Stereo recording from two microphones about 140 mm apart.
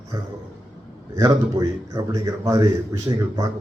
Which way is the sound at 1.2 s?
30° right (ahead or behind).